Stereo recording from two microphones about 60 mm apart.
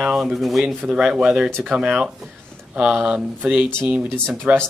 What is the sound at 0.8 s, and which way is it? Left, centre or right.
Speech, centre.